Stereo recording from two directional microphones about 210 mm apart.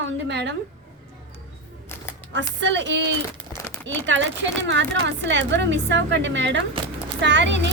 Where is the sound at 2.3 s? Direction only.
60° right (ahead or behind).